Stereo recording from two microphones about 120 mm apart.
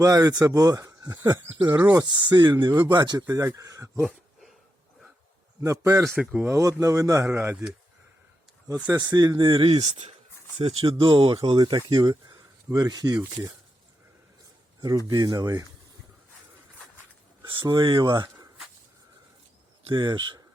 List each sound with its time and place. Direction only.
0.0 s speech: 30° right (ahead or behind)
4.0 s a sound: centre (ahead or behind)
5.6 s speech: 25° right (ahead or behind)
6.1 s speech: 15° right (ahead or behind)
7.5 s speech: 5° right (ahead or behind)
8.6 s speech: 25° right (ahead or behind)
9.7 s speech: 60° right (ahead or behind)
10.6 s speech: 55° right (ahead or behind); by 13.2 s 35° right (ahead or behind)
14.8 s speech: 30° right (ahead or behind)
17.4 s speech: 40° right (ahead or behind)
19.9 s speech: 40° right (ahead or behind)